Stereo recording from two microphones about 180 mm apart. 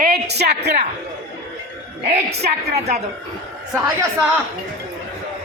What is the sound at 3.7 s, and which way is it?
Speech, 15° right (ahead or behind).